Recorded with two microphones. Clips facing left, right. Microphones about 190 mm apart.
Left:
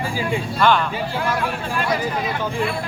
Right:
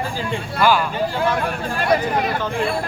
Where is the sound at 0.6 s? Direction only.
5° right (ahead or behind).